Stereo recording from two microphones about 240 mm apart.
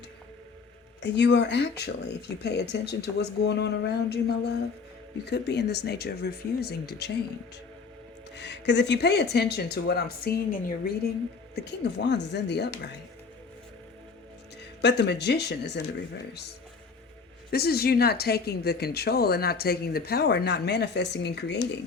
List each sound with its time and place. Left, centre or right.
1.0 s speech: left
8.4 s speech: left
14.6 s speech: left
17.5 s speech: left